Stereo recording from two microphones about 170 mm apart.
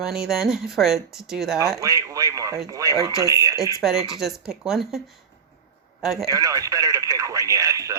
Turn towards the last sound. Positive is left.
turn(degrees=-20)  # may be behind; listen again after turning